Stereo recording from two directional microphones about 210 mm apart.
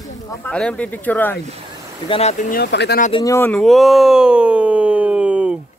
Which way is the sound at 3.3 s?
5° left (ahead or behind).